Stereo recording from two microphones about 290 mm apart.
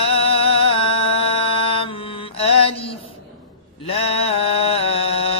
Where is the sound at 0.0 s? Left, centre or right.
Centre.